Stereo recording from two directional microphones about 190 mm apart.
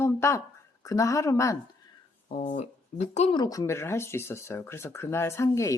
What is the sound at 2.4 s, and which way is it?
Speech, 35° left (ahead or behind).